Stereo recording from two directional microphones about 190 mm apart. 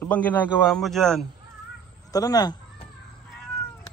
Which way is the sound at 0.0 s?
10° left (ahead or behind).